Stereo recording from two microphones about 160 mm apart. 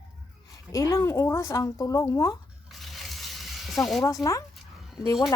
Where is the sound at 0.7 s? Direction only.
20° left (ahead or behind).